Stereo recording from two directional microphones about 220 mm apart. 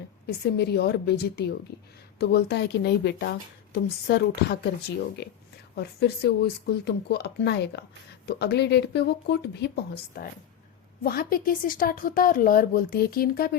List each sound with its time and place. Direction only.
0.3 s a woman's voice: 45° left (ahead or behind)